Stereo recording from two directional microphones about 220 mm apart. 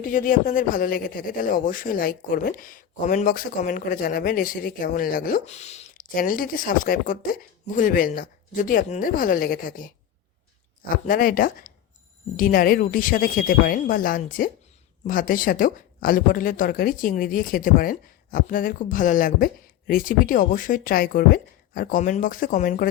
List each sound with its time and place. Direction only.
0.1 s speech: 35° left (ahead or behind)
11.0 s speech: 40° left (ahead or behind)